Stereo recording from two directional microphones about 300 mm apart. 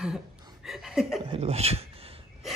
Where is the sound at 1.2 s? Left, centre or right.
Centre.